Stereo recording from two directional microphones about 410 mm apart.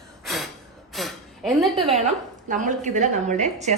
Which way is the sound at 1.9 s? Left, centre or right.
Centre.